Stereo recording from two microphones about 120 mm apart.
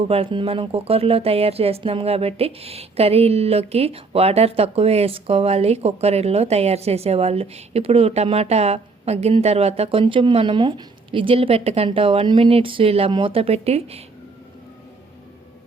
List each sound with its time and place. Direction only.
0.1 s speech: 55° right (ahead or behind)